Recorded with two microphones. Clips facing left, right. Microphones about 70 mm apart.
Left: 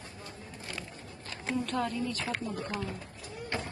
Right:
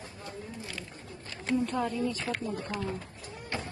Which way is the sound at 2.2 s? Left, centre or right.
Centre.